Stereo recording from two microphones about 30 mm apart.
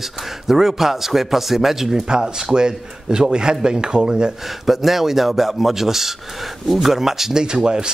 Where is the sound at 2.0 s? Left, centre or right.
Right.